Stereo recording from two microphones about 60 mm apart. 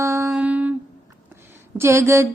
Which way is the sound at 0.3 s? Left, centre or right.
Right.